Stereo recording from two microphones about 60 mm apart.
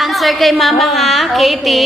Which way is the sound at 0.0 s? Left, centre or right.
Centre.